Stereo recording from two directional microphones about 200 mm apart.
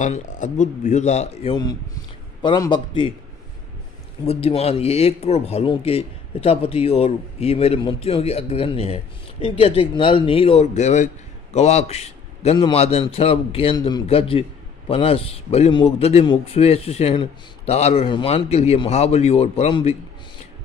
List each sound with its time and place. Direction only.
0.0 s a man's voice: 35° left (ahead or behind)
4.3 s a man's voice: 30° left (ahead or behind)